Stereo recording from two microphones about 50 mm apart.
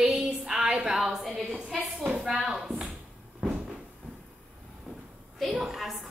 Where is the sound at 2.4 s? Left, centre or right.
Centre.